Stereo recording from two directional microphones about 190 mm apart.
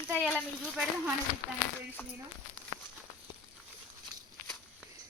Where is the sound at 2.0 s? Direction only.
10° left (ahead or behind).